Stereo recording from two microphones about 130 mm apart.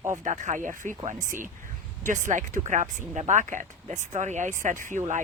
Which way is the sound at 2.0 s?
75° right (ahead or behind).